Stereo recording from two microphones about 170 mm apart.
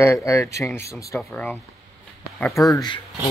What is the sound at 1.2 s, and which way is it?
Speech, 5° left (ahead or behind).